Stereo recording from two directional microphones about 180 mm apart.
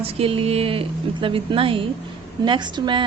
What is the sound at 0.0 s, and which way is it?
A woman's voice, 30° right (ahead or behind).